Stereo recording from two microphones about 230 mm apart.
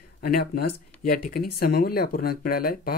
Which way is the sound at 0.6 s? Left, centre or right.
Left.